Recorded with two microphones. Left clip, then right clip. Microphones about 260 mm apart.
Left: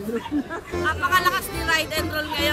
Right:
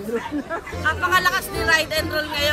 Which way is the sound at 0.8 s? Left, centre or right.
Centre.